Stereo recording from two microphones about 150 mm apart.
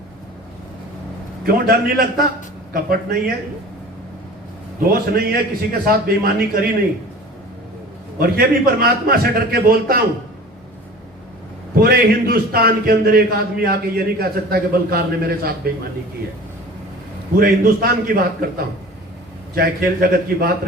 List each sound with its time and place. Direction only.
1.5 s a man's voice: 85° right
4.8 s a man's voice: 85° right
8.2 s a man's voice: 90° right
11.8 s a man's voice: 90° right
17.3 s a man's voice: 85° right
19.5 s a man's voice: 90° right